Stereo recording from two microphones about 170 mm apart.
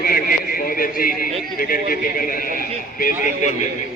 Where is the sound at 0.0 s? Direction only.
55° left (ahead or behind).